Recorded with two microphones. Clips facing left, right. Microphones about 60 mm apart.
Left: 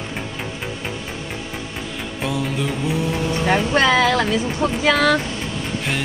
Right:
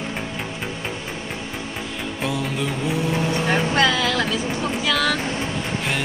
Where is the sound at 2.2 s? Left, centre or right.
Centre.